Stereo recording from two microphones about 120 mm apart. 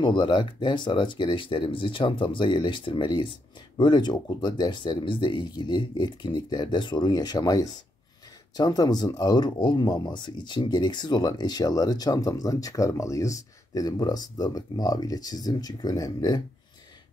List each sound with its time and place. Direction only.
0.0 s speech: 40° left (ahead or behind)